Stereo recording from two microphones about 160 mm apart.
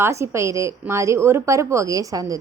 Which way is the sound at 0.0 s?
15° right (ahead or behind).